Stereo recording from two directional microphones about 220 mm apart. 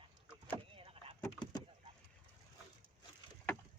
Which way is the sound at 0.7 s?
25° right (ahead or behind).